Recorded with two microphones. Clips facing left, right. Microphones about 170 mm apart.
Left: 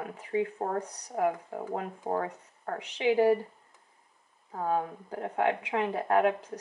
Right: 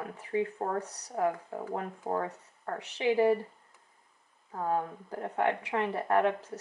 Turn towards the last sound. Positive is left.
turn(degrees=15)  # may be behind; listen again after turning